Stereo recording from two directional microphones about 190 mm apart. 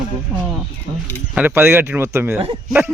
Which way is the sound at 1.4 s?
10° right (ahead or behind).